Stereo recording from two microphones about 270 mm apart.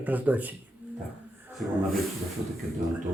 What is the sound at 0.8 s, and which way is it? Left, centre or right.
Music, centre.